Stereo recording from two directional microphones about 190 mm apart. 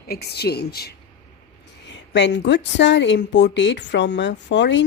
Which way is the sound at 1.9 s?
70° left (ahead or behind).